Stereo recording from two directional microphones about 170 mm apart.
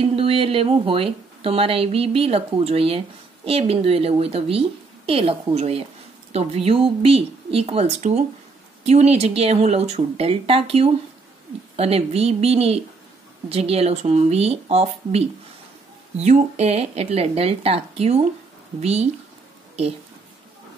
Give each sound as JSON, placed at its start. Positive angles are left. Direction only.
{"t": 0.0, "sound": "a woman's voice", "side_deg": -35}